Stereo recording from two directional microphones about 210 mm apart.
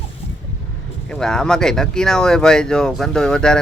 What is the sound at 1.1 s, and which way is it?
Speech, 5° left (ahead or behind).